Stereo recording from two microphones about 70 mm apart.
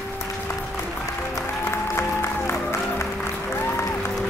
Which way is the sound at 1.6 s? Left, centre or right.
Left.